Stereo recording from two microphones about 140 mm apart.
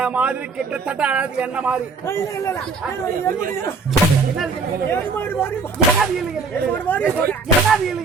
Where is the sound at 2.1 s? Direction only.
20° left (ahead or behind).